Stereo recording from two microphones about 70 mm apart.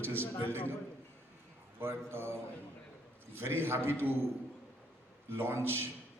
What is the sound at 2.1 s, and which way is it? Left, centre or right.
A man's voice, right.